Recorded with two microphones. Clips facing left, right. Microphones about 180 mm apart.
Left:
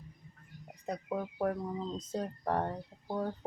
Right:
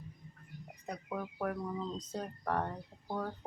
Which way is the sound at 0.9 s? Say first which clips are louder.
Left 4 dB; 30° left (ahead or behind).